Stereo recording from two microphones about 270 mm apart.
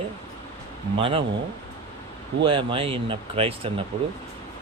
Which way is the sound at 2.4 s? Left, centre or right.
Centre.